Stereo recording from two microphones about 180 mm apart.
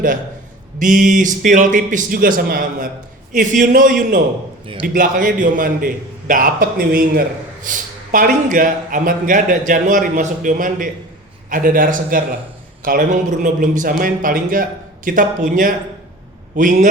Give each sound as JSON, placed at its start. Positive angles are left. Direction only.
{"t": 0.8, "sound": "a man's voice", "side_deg": -45}